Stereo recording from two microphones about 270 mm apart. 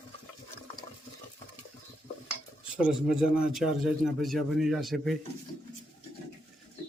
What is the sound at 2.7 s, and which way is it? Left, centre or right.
A man's voice, centre.